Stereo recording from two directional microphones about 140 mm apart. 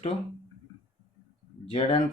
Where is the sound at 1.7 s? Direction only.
45° left (ahead or behind).